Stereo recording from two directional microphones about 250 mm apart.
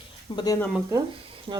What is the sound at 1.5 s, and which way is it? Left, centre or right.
Speech, right.